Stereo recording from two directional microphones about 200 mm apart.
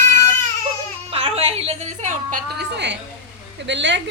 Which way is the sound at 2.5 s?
60° right (ahead or behind).